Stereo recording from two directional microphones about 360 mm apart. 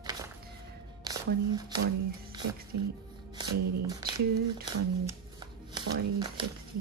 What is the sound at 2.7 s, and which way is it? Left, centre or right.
Speech, right.